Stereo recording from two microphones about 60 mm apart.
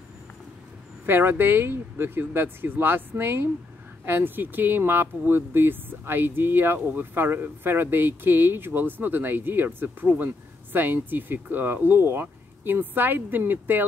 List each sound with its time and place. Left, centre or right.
1.0 s speech: right